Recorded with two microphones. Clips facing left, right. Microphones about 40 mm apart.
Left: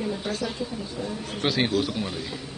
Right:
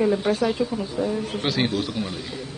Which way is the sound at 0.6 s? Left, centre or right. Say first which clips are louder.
Right 7 dB; right.